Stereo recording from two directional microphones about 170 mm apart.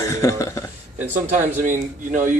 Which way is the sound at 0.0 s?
15° left (ahead or behind).